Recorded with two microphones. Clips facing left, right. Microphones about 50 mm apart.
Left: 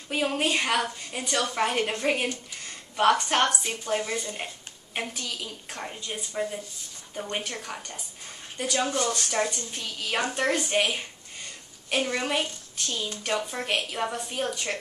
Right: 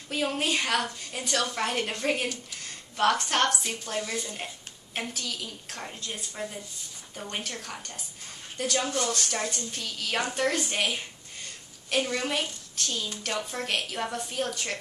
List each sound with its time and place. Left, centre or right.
0.1 s a woman's voice: centre